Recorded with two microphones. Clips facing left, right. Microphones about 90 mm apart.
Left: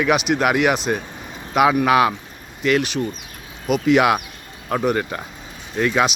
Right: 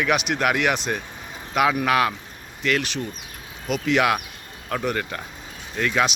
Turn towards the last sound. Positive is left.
turn(degrees=15)  # may be behind; listen again after turning